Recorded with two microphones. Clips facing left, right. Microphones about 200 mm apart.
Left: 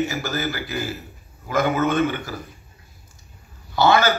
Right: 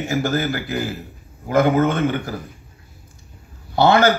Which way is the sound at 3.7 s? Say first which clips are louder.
Right 3 dB; 55° right (ahead or behind).